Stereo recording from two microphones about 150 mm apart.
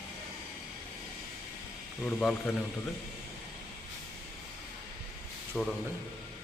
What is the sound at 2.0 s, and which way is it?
Speech, 10° left (ahead or behind).